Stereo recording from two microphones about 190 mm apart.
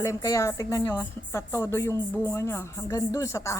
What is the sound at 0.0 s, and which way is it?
A woman's voice, 15° left (ahead or behind).